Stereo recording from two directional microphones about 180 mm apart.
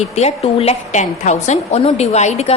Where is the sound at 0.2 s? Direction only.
40° left (ahead or behind).